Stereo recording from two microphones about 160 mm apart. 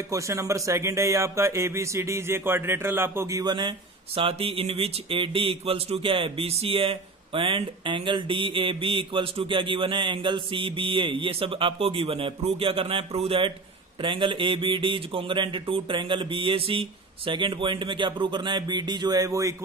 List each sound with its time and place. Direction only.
0.1 s speech: 20° right (ahead or behind)